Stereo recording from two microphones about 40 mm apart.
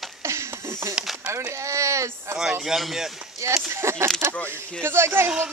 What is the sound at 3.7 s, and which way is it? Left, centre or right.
Speech, right.